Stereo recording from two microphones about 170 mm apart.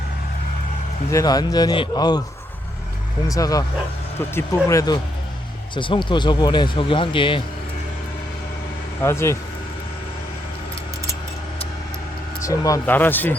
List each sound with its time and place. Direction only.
1.1 s speech: 20° left (ahead or behind)
3.2 s speech: 20° left (ahead or behind)
5.7 s speech: 30° left (ahead or behind)
9.0 s speech: 15° left (ahead or behind)
12.4 s speech: 20° left (ahead or behind)